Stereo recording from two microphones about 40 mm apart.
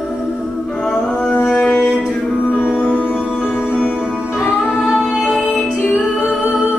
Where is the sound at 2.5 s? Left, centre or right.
Left.